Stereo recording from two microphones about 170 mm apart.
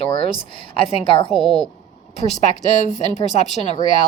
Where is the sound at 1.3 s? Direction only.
Centre (ahead or behind).